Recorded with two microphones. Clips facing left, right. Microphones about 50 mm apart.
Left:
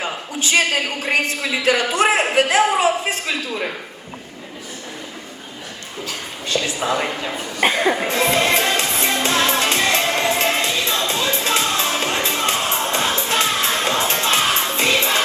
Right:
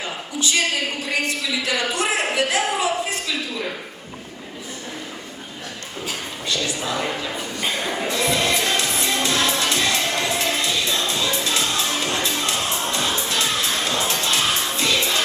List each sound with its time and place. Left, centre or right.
0.0 s a man's voice: left
6.5 s a woman's voice: left
7.6 s speech: left
8.0 s music: left